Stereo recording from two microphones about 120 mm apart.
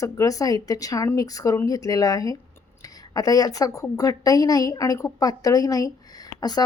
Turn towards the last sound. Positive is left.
turn(degrees=35)  # may be behind; listen again after turning